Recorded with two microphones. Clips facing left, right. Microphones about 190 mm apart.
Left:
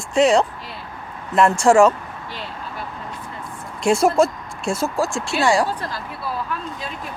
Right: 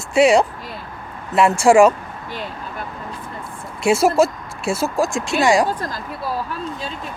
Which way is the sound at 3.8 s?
5° right (ahead or behind).